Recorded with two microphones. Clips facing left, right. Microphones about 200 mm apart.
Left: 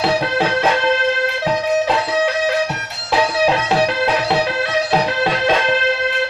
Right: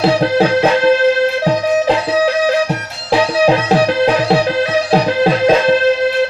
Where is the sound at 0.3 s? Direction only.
35° right (ahead or behind).